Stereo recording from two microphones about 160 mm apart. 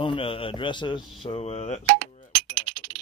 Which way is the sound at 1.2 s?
40° left (ahead or behind).